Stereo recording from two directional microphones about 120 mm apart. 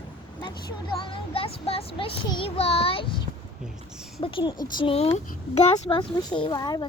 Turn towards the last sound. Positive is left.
turn(degrees=35)  # may be behind; listen again after turning